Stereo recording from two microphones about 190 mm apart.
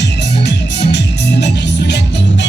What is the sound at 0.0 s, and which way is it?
Music, 65° left (ahead or behind).